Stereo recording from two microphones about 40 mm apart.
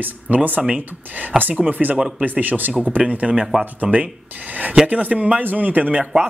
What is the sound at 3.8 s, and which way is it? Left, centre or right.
Speech, centre.